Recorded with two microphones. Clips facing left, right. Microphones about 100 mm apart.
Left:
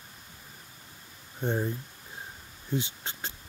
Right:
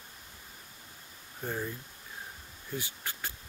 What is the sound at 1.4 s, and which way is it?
Speech, 30° left (ahead or behind).